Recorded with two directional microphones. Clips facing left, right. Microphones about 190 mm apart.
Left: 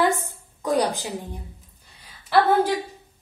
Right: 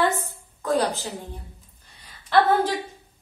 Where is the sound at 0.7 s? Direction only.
15° left (ahead or behind).